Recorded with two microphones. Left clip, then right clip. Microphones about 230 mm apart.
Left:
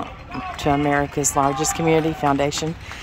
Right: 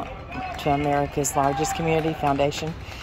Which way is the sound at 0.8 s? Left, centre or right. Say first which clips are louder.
Left 3 dB; centre.